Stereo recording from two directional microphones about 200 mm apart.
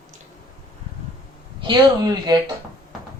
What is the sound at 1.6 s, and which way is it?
Speech, 20° right (ahead or behind).